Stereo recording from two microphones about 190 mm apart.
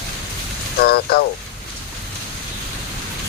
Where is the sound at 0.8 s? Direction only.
55° left (ahead or behind).